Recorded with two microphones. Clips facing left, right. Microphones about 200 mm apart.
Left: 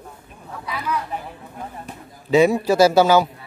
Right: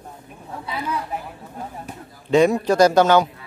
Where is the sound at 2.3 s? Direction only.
5° left (ahead or behind).